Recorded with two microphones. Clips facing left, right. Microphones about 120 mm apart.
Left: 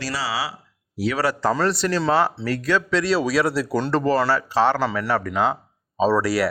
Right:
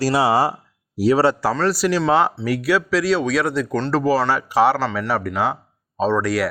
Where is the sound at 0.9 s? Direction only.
40° right (ahead or behind).